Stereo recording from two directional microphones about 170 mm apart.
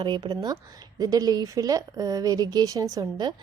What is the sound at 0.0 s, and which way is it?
A woman's voice, 25° right (ahead or behind).